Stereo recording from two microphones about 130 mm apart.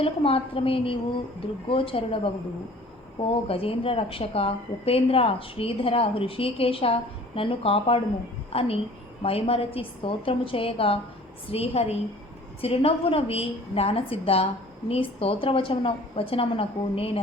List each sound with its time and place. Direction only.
0.0 s a woman's voice: 45° left (ahead or behind)